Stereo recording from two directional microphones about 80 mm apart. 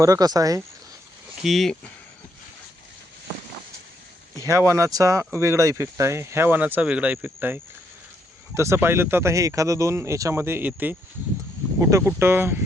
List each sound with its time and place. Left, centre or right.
0.0 s speech: right
1.4 s speech: centre
4.4 s speech: right
11.8 s speech: right
12.0 s speech: right